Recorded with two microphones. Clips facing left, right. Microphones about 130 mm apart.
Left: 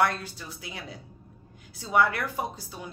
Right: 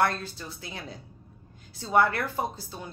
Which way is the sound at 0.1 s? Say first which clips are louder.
Right 1 dB; 10° left (ahead or behind).